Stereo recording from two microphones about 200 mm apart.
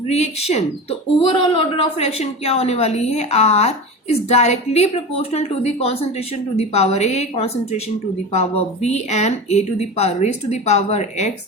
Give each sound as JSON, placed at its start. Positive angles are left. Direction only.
{"t": 0.1, "sound": "speech", "side_deg": 30}